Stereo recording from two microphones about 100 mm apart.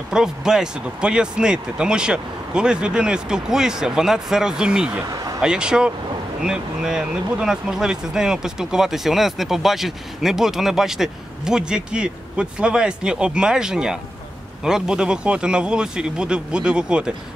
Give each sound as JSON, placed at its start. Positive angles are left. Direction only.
{"t": 0.1, "sound": "speech", "side_deg": -5}
{"t": 5.0, "sound": "a sound", "side_deg": -40}
{"t": 5.4, "sound": "speech", "side_deg": -10}